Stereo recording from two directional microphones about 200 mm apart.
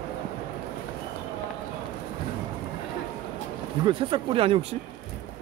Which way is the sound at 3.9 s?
25° right (ahead or behind).